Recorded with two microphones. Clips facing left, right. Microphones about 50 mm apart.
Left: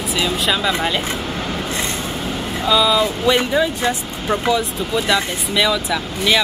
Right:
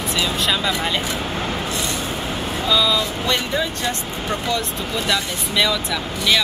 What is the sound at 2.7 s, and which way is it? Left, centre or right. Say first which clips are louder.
Speech: left 4 dB; centre.